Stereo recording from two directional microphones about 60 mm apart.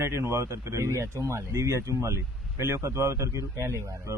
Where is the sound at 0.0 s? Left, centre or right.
Right.